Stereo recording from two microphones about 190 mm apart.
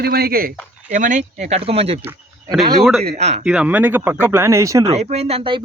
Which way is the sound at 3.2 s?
35° right (ahead or behind).